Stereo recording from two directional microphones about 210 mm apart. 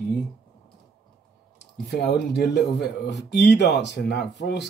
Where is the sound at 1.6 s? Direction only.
50° left (ahead or behind).